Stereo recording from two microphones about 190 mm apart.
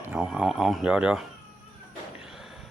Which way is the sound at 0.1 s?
5° right (ahead or behind).